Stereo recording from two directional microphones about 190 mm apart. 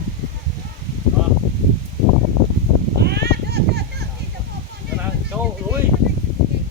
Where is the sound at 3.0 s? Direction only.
60° right (ahead or behind).